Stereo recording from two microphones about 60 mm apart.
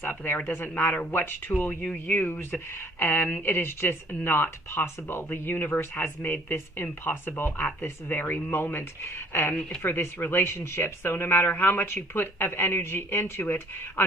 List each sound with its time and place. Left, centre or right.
0.0 s speech: left
9.5 s speech: left
9.8 s speech: left
10.4 s speech: left
13.4 s speech: left